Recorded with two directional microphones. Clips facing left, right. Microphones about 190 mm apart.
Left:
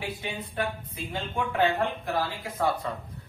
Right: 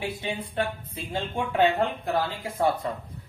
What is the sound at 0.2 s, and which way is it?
Speech, 25° right (ahead or behind).